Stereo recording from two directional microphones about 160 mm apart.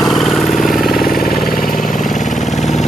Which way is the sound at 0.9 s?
65° left (ahead or behind).